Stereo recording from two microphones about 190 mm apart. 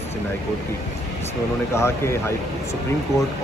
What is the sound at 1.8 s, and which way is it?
Speech, 15° left (ahead or behind).